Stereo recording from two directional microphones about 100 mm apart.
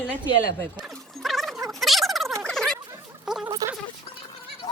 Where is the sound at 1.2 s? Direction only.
Centre (ahead or behind).